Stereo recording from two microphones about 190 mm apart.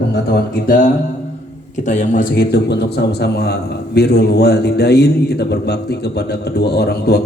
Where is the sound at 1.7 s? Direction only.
40° left (ahead or behind).